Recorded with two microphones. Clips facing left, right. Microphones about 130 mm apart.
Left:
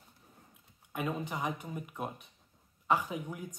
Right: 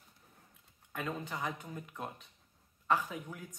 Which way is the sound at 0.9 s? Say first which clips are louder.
Left 3 dB; 15° left (ahead or behind).